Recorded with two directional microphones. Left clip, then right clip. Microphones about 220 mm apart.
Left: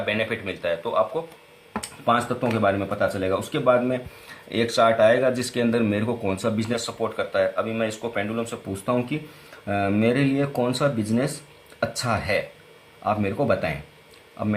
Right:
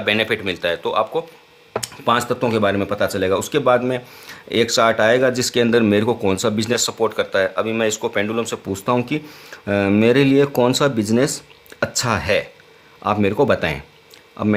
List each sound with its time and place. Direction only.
0.0 s speech: 50° right (ahead or behind)